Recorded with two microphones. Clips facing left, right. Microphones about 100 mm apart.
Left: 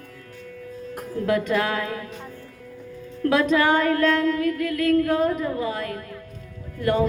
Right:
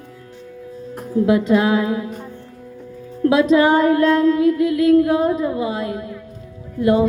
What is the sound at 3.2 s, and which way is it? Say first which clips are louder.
A woman's voice: right 6 dB; 15° right (ahead or behind).